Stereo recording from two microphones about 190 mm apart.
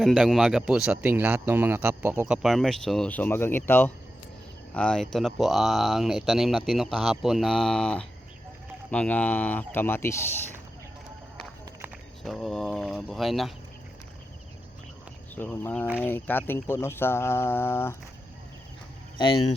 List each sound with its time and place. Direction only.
0.0 s speech: centre (ahead or behind)
12.2 s speech: centre (ahead or behind)
15.4 s speech: 10° left (ahead or behind)
19.1 s speech: 25° left (ahead or behind)